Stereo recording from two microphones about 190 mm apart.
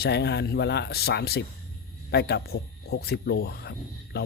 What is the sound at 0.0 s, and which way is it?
Speech, 60° left (ahead or behind).